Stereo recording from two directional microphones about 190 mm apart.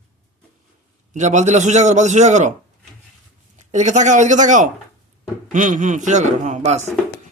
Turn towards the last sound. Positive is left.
turn(degrees=-35)  # may be behind; listen again after turning